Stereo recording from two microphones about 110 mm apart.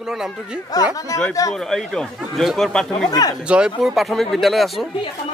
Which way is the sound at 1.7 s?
5° left (ahead or behind).